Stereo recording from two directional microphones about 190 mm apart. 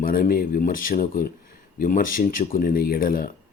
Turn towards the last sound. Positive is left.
turn(degrees=50)  # may be behind; listen again after turning